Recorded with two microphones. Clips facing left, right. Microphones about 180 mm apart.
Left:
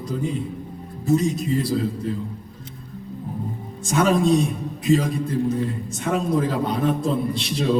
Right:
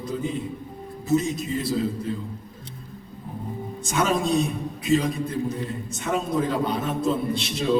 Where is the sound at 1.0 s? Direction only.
Centre (ahead or behind).